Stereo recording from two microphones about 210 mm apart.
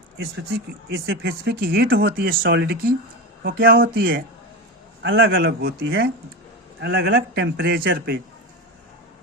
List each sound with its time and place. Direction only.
1.0 s speech: 50° right (ahead or behind)
5.0 s a man's voice: 65° right (ahead or behind)
5.3 s speech: 45° right (ahead or behind)